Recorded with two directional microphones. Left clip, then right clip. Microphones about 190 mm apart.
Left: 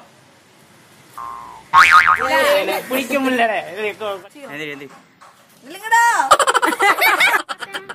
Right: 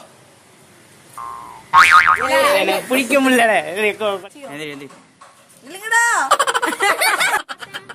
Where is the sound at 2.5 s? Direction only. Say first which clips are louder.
Right 1 dB; 55° right (ahead or behind).